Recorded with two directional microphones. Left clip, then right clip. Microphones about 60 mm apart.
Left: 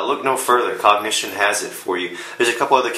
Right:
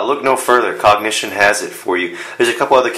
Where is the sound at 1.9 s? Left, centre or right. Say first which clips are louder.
Right 6 dB; right.